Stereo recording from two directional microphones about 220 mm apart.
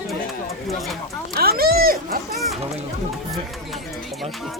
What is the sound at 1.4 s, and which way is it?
Cat, 45° right (ahead or behind).